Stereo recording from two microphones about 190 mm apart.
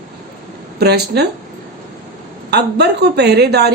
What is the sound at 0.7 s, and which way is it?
Speech, 60° right (ahead or behind).